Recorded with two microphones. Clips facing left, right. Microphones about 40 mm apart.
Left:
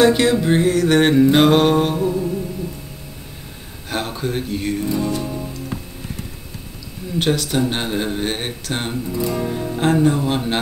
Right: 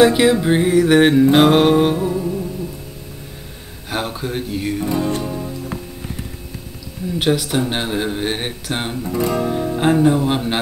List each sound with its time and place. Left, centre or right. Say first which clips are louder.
0.0 s speech: right 2 dB; centre
1.3 s music: right 2 dB; centre
3.9 s speech: even; centre
4.8 s music: right 3 dB; right
5.2 s music: right 2 dB; centre
7.2 s speech: right 1 dB; centre
9.0 s music: right 3 dB; right
9.5 s speech: right 2 dB; centre